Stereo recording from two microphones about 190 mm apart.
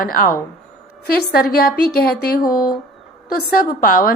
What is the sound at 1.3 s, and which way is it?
Speech, 50° left (ahead or behind).